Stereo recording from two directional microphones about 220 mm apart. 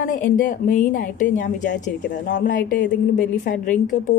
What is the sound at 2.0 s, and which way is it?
Speech, 50° left (ahead or behind).